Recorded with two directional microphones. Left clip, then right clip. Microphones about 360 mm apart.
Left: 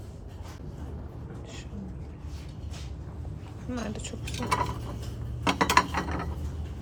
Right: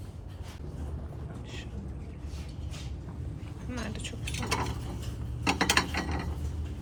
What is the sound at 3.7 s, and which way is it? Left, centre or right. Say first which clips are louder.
Speech: left 3 dB; centre.